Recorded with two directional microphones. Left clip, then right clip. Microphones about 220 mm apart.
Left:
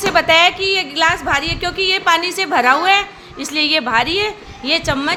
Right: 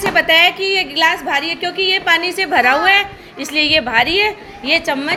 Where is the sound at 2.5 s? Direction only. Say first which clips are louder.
Right 1 dB; 90° left.